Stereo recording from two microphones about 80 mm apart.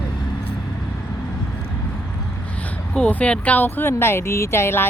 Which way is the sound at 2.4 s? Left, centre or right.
Centre.